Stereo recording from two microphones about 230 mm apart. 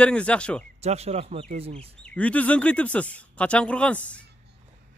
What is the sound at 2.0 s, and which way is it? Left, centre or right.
Speech, centre.